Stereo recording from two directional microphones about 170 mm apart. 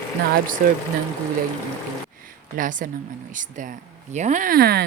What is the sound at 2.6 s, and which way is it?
Speech, 50° right (ahead or behind).